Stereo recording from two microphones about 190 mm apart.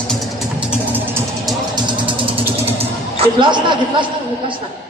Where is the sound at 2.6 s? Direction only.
30° right (ahead or behind).